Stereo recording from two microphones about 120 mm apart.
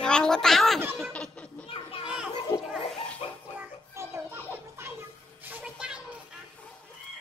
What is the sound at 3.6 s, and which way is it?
Music, 20° right (ahead or behind).